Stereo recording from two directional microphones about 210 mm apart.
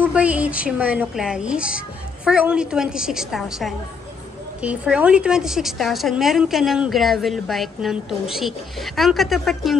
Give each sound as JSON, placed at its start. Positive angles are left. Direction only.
{"t": 0.0, "sound": "a woman's voice", "side_deg": -5}